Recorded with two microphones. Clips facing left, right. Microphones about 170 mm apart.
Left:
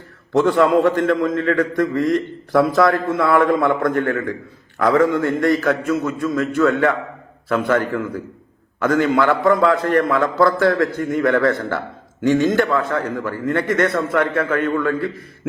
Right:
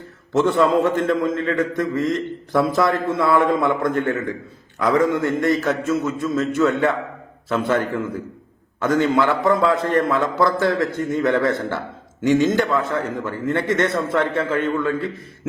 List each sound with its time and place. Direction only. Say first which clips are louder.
0.3 s a man's voice: left 2 dB; 25° right (ahead or behind)